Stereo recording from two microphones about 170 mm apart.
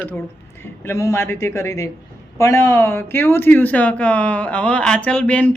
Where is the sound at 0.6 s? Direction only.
15° left (ahead or behind).